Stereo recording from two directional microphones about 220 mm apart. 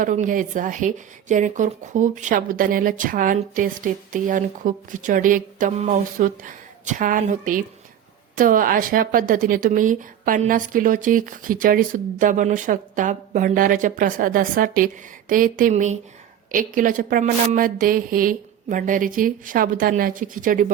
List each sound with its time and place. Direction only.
0.0 s speech: 35° right (ahead or behind)